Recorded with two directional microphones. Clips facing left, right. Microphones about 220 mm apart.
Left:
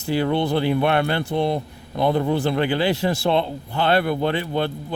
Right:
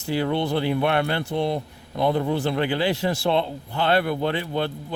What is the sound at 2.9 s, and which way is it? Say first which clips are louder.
Speech: left 2 dB; 30° left (ahead or behind).